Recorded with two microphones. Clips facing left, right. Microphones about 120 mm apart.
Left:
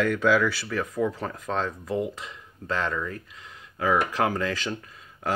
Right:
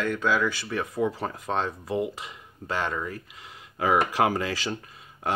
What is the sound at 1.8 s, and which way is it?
Speech, 5° right (ahead or behind).